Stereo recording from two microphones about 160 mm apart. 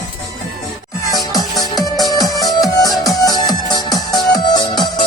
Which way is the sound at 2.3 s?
25° left (ahead or behind).